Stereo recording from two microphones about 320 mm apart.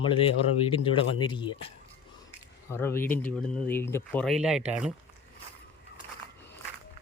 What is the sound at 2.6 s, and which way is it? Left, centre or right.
Speech, centre.